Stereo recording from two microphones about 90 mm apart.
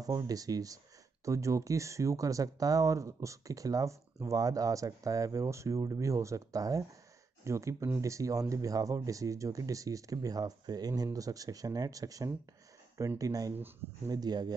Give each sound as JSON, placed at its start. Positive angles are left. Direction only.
{"t": 0.0, "sound": "speech", "side_deg": -45}